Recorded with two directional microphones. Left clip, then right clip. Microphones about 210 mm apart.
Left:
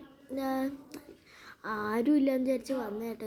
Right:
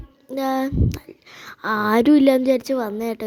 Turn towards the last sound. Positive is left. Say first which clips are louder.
# right 12 dB
turn(degrees=-40)  # may be behind; listen again after turning